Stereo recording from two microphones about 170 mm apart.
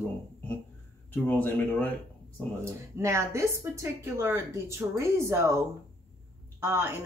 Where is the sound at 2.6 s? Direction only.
15° right (ahead or behind).